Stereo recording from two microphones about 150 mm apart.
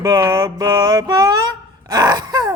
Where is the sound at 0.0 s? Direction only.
20° right (ahead or behind).